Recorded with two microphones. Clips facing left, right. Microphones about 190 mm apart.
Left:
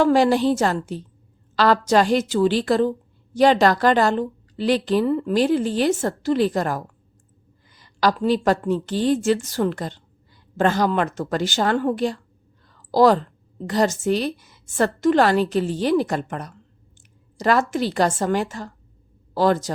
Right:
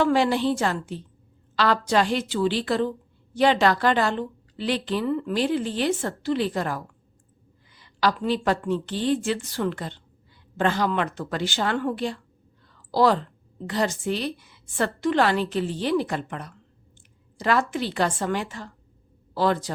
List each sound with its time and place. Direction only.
0.0 s a woman's voice: 40° left (ahead or behind)
12.6 s a sound: 45° left (ahead or behind)
13.7 s a woman's voice: 40° left (ahead or behind)